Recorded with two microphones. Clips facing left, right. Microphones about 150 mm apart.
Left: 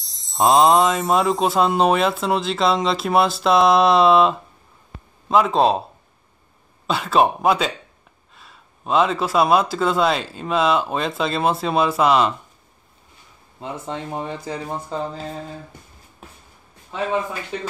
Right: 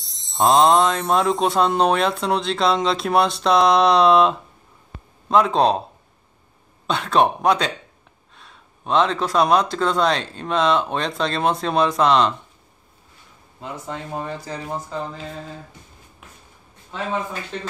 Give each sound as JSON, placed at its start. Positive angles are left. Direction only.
{"t": 0.0, "sound": "speech", "side_deg": 0}
{"t": 6.9, "sound": "speech", "side_deg": 5}
{"t": 13.6, "sound": "speech", "side_deg": 25}
{"t": 14.9, "sound": "mantra", "side_deg": 30}
{"t": 16.2, "sound": "shuffle", "side_deg": 35}
{"t": 17.5, "sound": "speech", "side_deg": 10}